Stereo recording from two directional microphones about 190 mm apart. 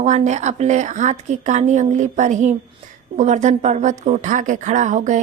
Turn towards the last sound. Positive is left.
turn(degrees=-40)  # may be behind; listen again after turning